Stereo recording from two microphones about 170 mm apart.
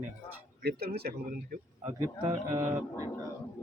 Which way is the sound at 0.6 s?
70° right (ahead or behind).